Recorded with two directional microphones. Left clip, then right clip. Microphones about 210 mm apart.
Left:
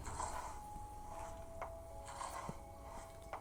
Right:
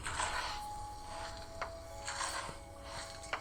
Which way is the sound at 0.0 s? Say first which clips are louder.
Right 8 dB; 40° right (ahead or behind).